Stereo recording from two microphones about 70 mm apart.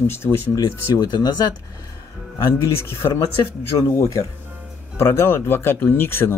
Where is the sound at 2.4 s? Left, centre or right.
Left.